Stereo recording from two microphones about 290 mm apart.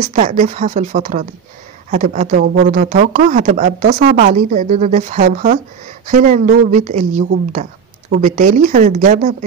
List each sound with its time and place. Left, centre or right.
0.0 s speech: right